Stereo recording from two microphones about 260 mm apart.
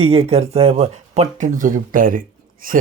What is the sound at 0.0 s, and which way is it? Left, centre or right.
Speech, right.